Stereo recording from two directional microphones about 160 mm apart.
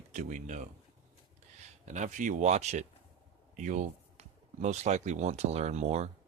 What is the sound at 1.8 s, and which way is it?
Speech, 50° right (ahead or behind).